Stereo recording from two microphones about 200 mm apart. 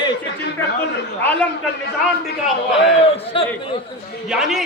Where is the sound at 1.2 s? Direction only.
10° left (ahead or behind).